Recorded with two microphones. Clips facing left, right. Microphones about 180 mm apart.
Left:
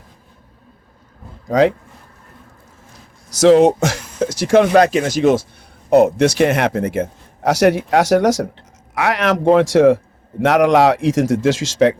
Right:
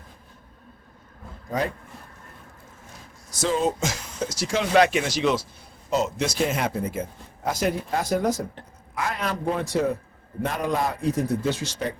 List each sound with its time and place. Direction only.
1.5 s speech: 85° left
3.2 s speech: 80° left; by 4.8 s 60° left (ahead or behind)
4.8 s speech: 40° left (ahead or behind)
5.9 s a man's voice: 60° left (ahead or behind); by 11.9 s 90° left